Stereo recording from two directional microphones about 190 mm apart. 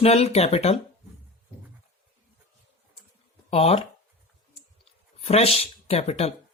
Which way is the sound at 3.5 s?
30° left (ahead or behind).